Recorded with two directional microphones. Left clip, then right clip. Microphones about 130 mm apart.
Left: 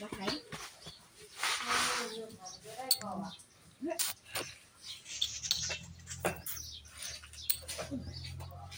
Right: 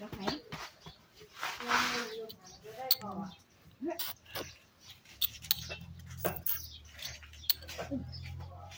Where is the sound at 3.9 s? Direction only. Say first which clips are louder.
Left 3 dB; 5° right (ahead or behind).